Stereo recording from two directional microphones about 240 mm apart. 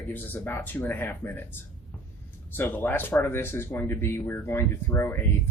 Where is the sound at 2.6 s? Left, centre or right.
Centre.